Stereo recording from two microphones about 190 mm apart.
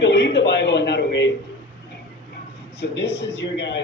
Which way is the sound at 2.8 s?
65° left (ahead or behind).